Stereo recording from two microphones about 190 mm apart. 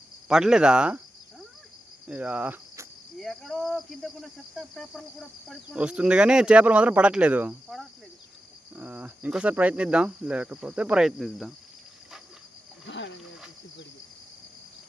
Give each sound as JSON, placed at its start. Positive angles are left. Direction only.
{"t": 0.3, "sound": "speech", "side_deg": -5}
{"t": 2.0, "sound": "insect", "side_deg": -5}
{"t": 3.2, "sound": "speech", "side_deg": 0}
{"t": 12.9, "sound": "speech", "side_deg": 70}